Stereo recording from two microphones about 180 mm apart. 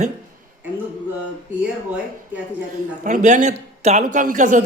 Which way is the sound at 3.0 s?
40° right (ahead or behind).